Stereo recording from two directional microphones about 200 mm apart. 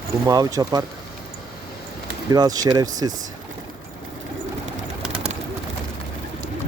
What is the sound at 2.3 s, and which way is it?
Speech, 20° right (ahead or behind).